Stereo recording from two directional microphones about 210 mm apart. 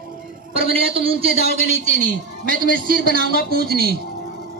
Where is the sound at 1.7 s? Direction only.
40° right (ahead or behind).